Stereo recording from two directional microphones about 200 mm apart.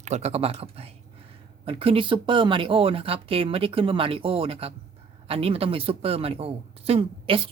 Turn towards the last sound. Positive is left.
turn(degrees=-25)  # may be behind; listen again after turning